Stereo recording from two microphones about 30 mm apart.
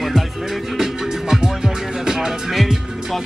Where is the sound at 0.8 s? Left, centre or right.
Centre.